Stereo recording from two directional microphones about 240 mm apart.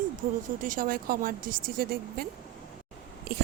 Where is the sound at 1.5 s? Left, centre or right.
Right.